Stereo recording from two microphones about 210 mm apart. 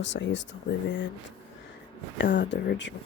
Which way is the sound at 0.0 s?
60° left (ahead or behind).